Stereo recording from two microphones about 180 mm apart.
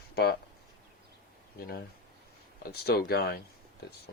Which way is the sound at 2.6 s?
60° left (ahead or behind).